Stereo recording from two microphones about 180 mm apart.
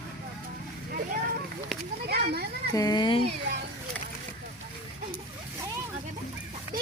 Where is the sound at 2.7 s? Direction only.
20° left (ahead or behind).